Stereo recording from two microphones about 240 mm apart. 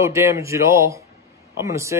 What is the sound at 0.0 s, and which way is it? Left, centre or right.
Speech, centre.